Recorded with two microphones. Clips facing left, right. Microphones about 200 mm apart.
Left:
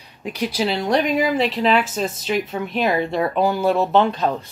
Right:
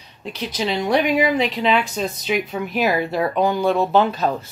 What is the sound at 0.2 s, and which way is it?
A woman's voice, 10° left (ahead or behind).